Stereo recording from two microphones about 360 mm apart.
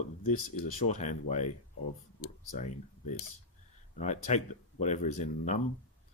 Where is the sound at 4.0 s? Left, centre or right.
Centre.